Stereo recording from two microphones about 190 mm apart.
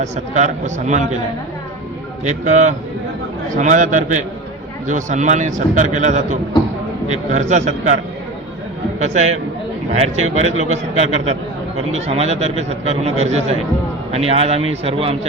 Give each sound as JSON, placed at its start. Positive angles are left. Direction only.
{"t": 0.0, "sound": "a man's voice", "side_deg": -40}
{"t": 2.2, "sound": "a man's voice", "side_deg": -40}
{"t": 9.0, "sound": "a man's voice", "side_deg": -35}